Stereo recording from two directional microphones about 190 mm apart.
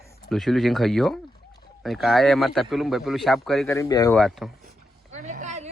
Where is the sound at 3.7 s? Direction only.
15° left (ahead or behind).